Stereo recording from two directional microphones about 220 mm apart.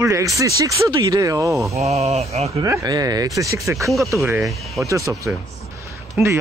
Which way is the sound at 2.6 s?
15° right (ahead or behind).